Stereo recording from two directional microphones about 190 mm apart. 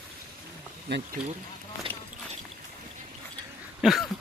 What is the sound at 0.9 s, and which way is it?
Speech, 65° right (ahead or behind).